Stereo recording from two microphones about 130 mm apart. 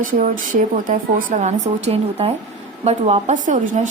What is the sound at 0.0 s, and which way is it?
A woman's voice, 90° right.